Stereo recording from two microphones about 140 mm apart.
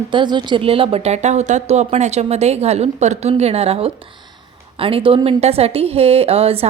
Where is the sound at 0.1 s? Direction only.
35° right (ahead or behind).